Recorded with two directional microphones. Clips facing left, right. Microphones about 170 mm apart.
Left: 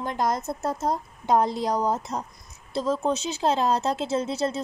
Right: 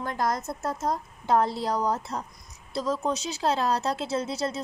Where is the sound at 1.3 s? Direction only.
15° left (ahead or behind).